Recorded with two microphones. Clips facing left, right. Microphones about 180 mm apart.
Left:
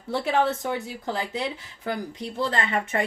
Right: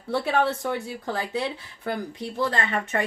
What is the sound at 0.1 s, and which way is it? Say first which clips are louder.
A woman's voice: even; 20° left (ahead or behind).